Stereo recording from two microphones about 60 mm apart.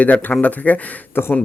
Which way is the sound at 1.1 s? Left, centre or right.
Left.